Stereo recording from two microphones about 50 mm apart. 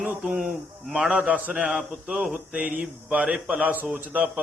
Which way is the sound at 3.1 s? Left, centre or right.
Right.